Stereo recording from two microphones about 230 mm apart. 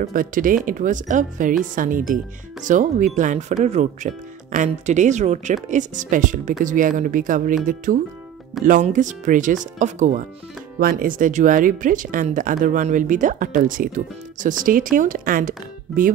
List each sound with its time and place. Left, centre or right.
0.0 s speech: right